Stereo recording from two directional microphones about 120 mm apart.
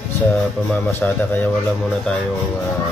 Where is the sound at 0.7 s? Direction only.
15° left (ahead or behind).